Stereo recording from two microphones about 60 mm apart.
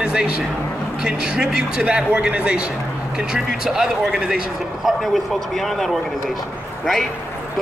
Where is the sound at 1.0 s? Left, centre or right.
Centre.